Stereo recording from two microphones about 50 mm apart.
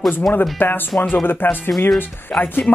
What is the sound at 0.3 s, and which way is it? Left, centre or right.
Speech, left.